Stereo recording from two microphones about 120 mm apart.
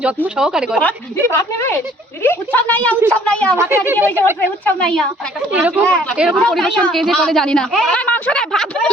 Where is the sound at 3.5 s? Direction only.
20° right (ahead or behind).